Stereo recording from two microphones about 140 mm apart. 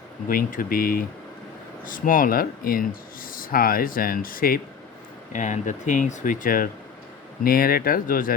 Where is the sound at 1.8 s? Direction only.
75° left (ahead or behind).